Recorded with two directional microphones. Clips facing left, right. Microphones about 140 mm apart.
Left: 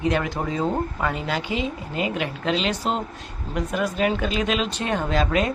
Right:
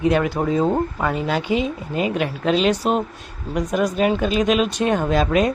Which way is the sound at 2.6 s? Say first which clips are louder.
Right 6 dB; 15° right (ahead or behind).